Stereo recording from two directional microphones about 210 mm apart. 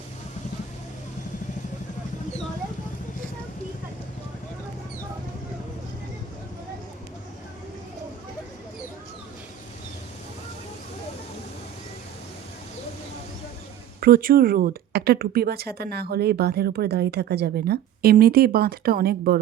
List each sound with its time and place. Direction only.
14.0 s speech: 45° right (ahead or behind)